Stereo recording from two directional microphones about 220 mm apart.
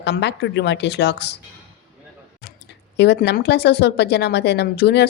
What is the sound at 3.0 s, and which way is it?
Speech, 50° left (ahead or behind).